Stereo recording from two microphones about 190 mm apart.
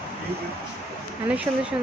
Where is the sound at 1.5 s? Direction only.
15° right (ahead or behind).